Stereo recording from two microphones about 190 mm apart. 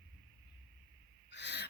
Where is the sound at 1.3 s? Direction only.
65° left (ahead or behind).